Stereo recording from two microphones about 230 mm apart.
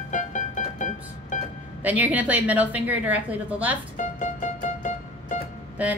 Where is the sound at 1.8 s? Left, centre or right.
Centre.